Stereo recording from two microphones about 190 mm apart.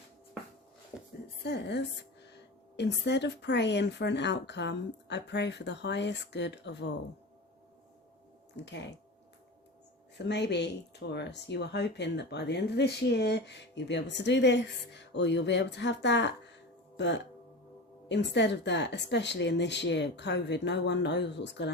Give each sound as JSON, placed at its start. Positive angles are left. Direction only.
{"t": 1.5, "sound": "speech", "side_deg": 65}
{"t": 8.6, "sound": "speech", "side_deg": 65}
{"t": 10.2, "sound": "speech", "side_deg": 65}